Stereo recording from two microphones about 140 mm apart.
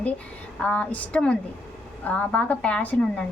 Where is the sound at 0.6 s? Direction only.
10° left (ahead or behind).